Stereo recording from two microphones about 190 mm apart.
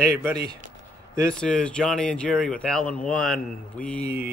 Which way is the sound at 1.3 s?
5° left (ahead or behind).